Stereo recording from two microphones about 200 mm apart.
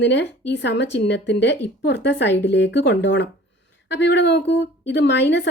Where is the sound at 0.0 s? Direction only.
60° left (ahead or behind).